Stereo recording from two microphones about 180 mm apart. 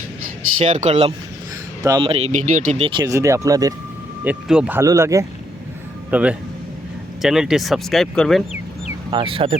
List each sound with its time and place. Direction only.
0.6 s speech: 40° right (ahead or behind)
1.8 s speech: 20° right (ahead or behind)
4.2 s speech: 5° right (ahead or behind)
9.0 s speech: 30° right (ahead or behind)